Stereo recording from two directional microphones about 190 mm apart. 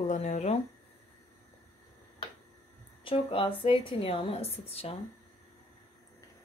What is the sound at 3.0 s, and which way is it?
Speech, 30° left (ahead or behind).